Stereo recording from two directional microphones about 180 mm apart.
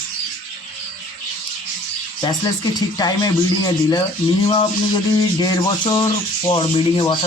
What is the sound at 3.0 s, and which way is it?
Speech, 20° left (ahead or behind).